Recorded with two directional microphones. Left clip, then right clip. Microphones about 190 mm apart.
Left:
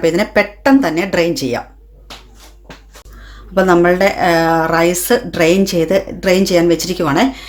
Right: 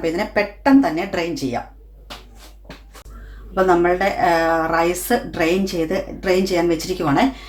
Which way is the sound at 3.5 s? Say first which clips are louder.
Left 5 dB; 55° left (ahead or behind).